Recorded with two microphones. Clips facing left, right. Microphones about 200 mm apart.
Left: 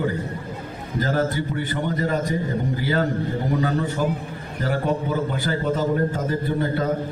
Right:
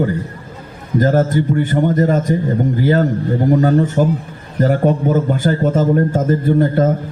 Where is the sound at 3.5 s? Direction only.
45° right (ahead or behind).